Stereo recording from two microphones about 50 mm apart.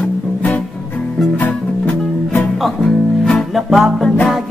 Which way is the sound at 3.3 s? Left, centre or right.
Centre.